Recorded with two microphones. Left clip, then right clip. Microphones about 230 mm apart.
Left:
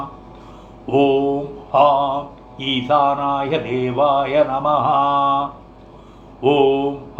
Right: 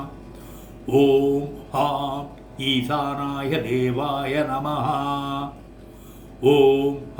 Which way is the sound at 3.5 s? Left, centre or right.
Right.